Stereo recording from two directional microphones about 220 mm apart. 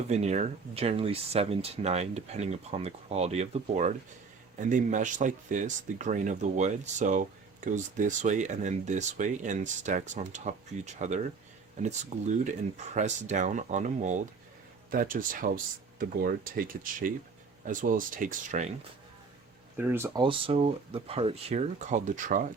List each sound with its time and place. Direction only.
0.1 s speech: 30° right (ahead or behind)
19.7 s speech: 10° right (ahead or behind)
20.2 s speech: 25° right (ahead or behind)